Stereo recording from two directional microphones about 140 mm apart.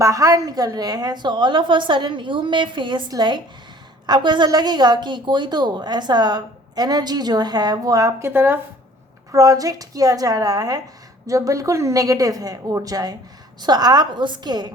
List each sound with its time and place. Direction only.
0.0 s a woman's voice: 25° right (ahead or behind)